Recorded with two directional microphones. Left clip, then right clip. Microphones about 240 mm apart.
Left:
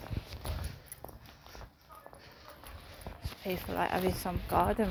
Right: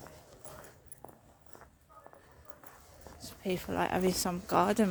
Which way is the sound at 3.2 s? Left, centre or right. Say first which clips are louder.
Right 2 dB; right.